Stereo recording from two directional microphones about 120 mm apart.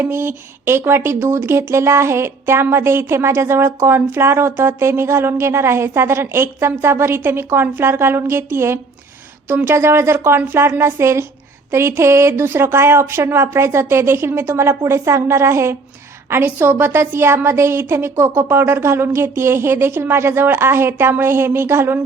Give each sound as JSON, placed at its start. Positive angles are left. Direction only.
{"t": 0.0, "sound": "speech", "side_deg": -20}